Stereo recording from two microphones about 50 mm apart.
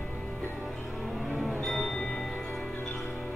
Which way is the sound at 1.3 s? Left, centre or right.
Centre.